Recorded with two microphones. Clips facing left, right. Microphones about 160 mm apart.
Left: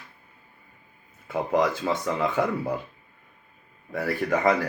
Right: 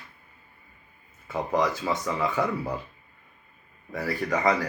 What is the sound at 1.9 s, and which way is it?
Speech, 55° left (ahead or behind).